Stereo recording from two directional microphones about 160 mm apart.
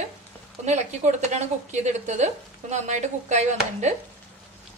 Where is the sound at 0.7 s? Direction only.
45° right (ahead or behind).